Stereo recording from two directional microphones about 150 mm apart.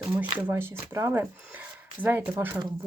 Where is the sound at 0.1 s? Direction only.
10° right (ahead or behind).